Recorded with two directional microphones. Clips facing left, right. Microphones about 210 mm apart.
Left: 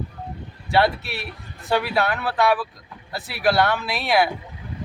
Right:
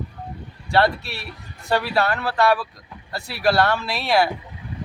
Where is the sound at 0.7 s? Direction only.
Centre (ahead or behind).